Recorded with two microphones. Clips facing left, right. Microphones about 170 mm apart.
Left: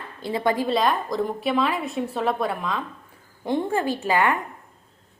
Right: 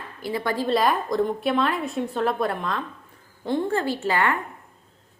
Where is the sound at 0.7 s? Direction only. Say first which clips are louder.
Right 1 dB; centre (ahead or behind).